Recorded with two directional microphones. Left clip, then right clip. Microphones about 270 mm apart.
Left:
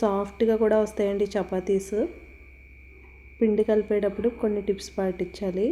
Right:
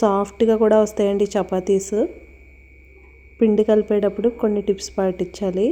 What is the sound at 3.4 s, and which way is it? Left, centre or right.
A woman's voice, centre.